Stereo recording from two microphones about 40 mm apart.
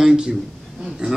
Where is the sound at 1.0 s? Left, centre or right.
Right.